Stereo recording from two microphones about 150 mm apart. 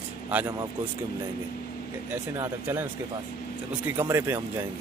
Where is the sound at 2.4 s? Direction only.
15° right (ahead or behind).